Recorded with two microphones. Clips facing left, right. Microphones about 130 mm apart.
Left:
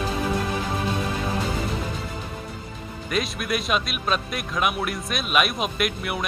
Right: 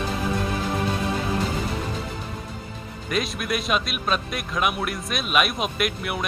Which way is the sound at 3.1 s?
Centre (ahead or behind).